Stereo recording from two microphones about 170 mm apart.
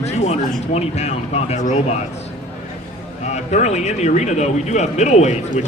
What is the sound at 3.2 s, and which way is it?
A man's voice, 45° left (ahead or behind).